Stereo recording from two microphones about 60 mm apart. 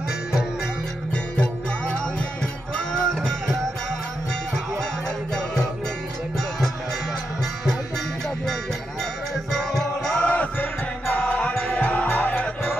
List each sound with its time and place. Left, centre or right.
1.1 s music: centre
9.5 s music: centre
10.2 s music: left
11.5 s music: centre
11.8 s music: left